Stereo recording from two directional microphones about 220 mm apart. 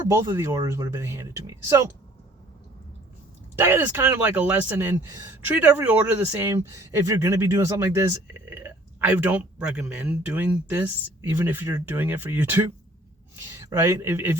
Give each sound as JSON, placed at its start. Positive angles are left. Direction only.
{"t": 0.1, "sound": "speech", "side_deg": -15}
{"t": 3.5, "sound": "speech", "side_deg": -10}